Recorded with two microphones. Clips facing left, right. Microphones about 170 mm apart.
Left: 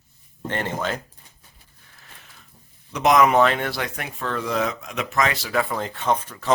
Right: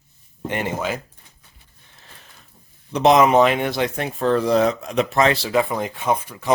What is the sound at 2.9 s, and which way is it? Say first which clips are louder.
Speech: right 3 dB; 30° right (ahead or behind).